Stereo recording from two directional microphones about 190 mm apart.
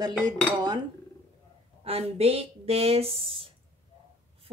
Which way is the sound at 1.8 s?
30° right (ahead or behind).